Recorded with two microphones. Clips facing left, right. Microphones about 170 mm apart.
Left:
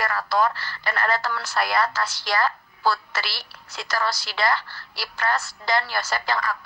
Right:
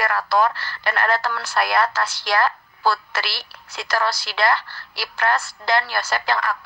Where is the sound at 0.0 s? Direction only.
65° right (ahead or behind).